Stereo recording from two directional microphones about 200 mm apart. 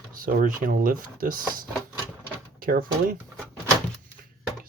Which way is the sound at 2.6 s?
45° right (ahead or behind).